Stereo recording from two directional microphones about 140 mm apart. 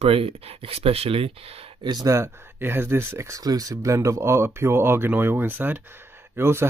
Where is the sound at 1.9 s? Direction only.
25° right (ahead or behind).